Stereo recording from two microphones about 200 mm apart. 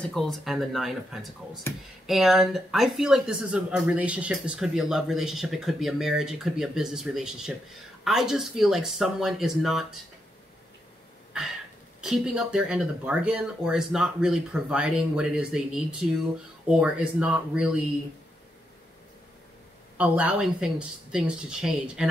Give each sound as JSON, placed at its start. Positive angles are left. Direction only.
{"t": 0.0, "sound": "speech", "side_deg": 0}
{"t": 12.0, "sound": "speech", "side_deg": -5}
{"t": 20.0, "sound": "speech", "side_deg": -5}